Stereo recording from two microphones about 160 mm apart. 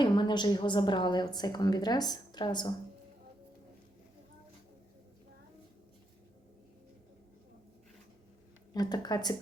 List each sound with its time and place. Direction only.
0.0 s a woman's voice: 30° left (ahead or behind)
8.7 s a woman's voice: 25° left (ahead or behind)